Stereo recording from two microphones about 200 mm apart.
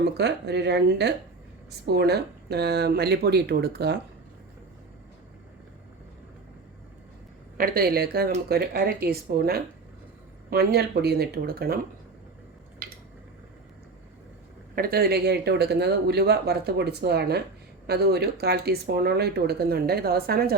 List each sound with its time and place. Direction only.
0.0 s speech: 55° right (ahead or behind)
7.6 s speech: 50° right (ahead or behind)
12.8 s a sound: 45° right (ahead or behind)
14.8 s speech: 50° right (ahead or behind)